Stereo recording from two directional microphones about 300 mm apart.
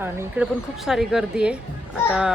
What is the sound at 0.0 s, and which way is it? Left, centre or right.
A woman's voice, centre.